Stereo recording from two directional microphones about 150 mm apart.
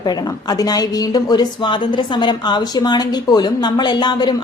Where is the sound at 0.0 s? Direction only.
25° left (ahead or behind).